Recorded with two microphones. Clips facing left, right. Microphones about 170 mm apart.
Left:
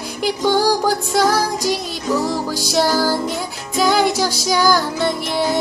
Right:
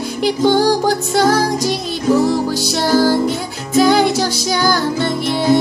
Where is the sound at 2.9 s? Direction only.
20° right (ahead or behind).